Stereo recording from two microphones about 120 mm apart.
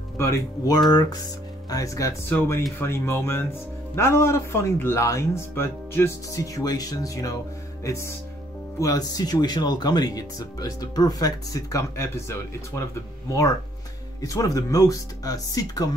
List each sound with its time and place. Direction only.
0.7 s speech: 35° left (ahead or behind)
2.2 s speech: 20° left (ahead or behind)
7.8 s music: 25° left (ahead or behind)
8.7 s speech: 30° left (ahead or behind)
14.2 s speech: 30° left (ahead or behind)